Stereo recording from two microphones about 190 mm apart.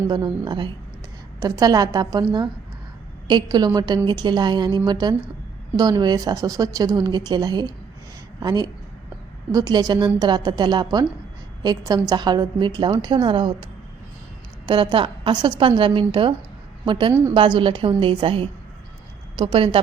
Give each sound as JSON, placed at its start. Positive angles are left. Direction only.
{"t": 0.1, "sound": "a woman's voice", "side_deg": -20}
{"t": 3.2, "sound": "a woman's voice", "side_deg": -20}
{"t": 14.7, "sound": "a woman's voice", "side_deg": -25}